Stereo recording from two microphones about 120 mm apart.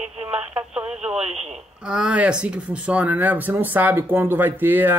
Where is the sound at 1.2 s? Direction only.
60° right (ahead or behind).